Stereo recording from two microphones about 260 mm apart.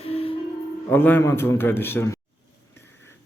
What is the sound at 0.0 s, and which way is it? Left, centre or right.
Music, left.